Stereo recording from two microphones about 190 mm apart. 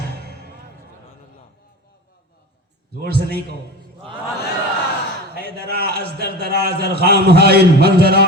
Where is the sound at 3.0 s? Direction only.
55° right (ahead or behind).